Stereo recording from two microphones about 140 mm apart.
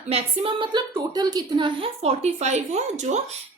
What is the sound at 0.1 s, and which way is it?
A woman's voice, 40° right (ahead or behind).